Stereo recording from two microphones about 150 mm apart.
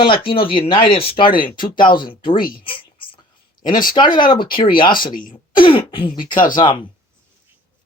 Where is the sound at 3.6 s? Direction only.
70° left (ahead or behind).